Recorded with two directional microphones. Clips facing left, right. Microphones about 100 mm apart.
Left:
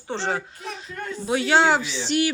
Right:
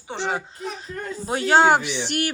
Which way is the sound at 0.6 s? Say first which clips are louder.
Right 2 dB; 40° right (ahead or behind).